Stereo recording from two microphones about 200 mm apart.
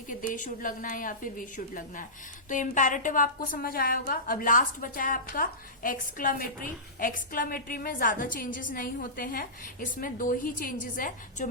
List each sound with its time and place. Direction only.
0.1 s a woman's voice: 40° left (ahead or behind)